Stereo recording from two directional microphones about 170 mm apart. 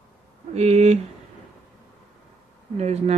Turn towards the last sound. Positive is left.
turn(degrees=-40)  # may be behind; listen again after turning